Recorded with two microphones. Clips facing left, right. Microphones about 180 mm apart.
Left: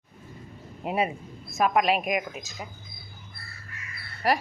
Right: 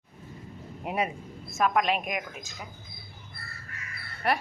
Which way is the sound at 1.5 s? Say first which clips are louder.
Left 2 dB; 10° left (ahead or behind).